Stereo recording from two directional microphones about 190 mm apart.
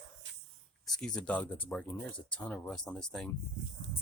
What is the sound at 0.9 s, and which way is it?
Speech, 5° left (ahead or behind).